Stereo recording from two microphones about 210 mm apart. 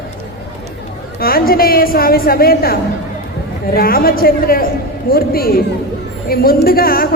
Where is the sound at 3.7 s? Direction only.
45° left (ahead or behind).